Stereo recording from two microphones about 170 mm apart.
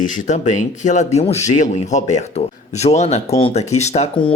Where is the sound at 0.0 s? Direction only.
50° left (ahead or behind).